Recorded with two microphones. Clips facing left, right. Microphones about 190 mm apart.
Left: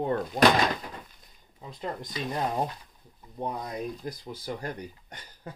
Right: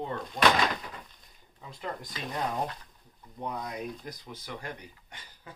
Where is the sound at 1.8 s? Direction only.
20° left (ahead or behind).